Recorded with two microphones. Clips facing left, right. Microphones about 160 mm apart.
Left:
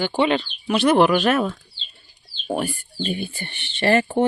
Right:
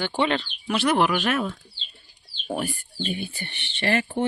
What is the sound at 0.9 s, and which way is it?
Speech, 35° left (ahead or behind).